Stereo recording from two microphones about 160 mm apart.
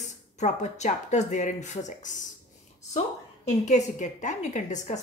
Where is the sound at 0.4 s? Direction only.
45° left (ahead or behind).